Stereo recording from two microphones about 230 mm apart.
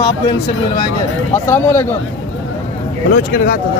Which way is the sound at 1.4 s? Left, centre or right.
Centre.